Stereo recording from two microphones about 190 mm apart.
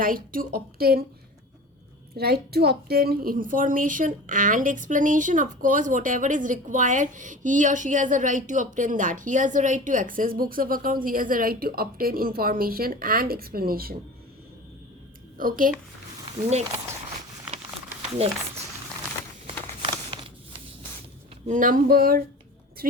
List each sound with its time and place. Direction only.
0.0 s a woman's voice: 50° right (ahead or behind)
2.1 s a woman's voice: 55° right (ahead or behind)
15.4 s a woman's voice: 45° right (ahead or behind)
19.5 s a sound: 30° right (ahead or behind)
21.4 s a woman's voice: 45° right (ahead or behind)